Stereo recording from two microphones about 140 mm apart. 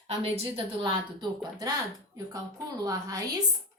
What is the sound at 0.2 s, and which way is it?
A woman's voice, 45° right (ahead or behind).